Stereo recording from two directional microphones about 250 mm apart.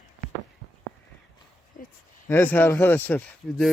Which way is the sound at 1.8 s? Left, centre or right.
Left.